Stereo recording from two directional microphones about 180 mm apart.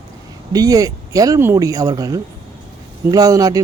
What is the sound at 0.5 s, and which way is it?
Speech, 20° right (ahead or behind).